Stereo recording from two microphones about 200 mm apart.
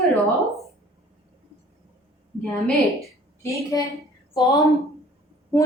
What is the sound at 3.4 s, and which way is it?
A woman's voice, 15° left (ahead or behind).